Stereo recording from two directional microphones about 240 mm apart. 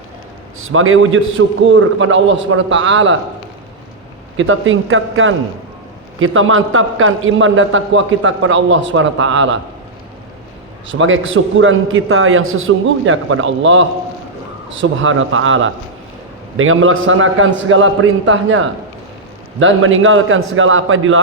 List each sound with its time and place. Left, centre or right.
0.7 s a man's voice: right
4.4 s a man's voice: right
10.8 s a man's voice: right